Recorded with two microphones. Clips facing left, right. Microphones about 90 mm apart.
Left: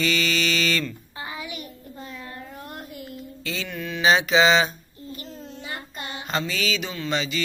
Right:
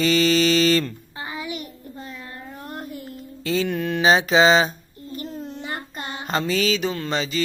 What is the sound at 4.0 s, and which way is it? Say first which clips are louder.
Child singing: right 2 dB; 35° right (ahead or behind).